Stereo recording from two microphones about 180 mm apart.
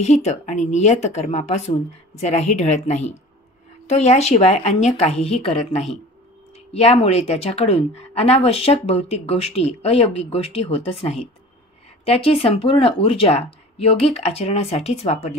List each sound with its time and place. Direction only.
0.0 s speech: 40° left (ahead or behind)
6.7 s speech: 35° left (ahead or behind)